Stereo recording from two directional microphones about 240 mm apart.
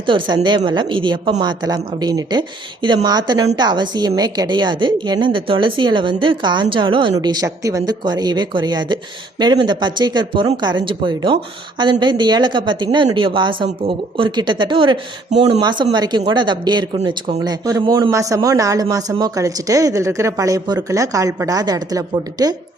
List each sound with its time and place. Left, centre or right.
0.0 s a woman's voice: right